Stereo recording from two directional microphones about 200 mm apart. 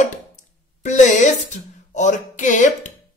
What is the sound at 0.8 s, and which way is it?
Music, 35° left (ahead or behind).